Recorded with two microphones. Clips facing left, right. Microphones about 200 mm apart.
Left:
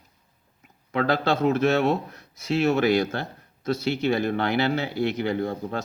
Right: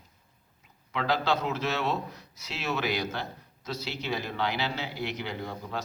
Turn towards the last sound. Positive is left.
turn(degrees=55)  # may be behind; listen again after turning